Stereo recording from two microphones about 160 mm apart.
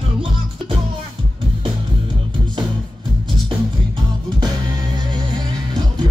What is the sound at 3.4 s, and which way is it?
Music, 30° right (ahead or behind).